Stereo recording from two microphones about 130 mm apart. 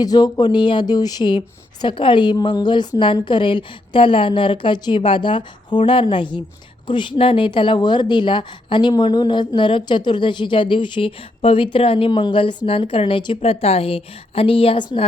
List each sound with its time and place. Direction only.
0.0 s a woman's voice: 30° left (ahead or behind)